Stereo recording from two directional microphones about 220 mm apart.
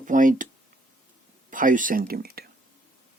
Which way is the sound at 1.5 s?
35° right (ahead or behind).